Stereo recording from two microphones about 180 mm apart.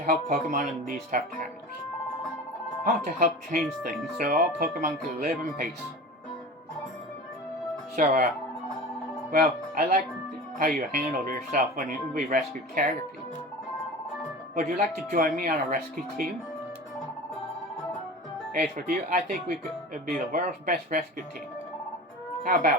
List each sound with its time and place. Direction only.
0.0 s speech: 50° right (ahead or behind)
2.8 s speech: 50° right (ahead or behind)
7.9 s speech: 45° right (ahead or behind)
9.3 s speech: 55° right (ahead or behind)
14.5 s speech: 45° right (ahead or behind)
18.8 s speech: 50° right (ahead or behind)